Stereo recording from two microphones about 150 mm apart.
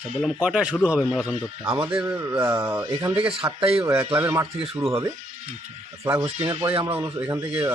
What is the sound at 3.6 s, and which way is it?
Speech, 40° right (ahead or behind).